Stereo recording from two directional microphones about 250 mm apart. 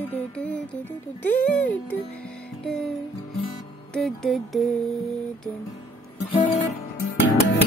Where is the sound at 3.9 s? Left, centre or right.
Centre.